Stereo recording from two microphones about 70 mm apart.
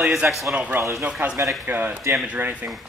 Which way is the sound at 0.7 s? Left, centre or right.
Right.